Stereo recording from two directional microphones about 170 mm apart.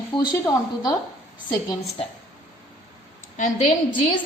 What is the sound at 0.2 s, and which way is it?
Speech, 25° left (ahead or behind).